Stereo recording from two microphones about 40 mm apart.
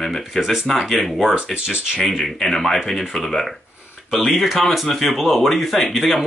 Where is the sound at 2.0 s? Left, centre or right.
Centre.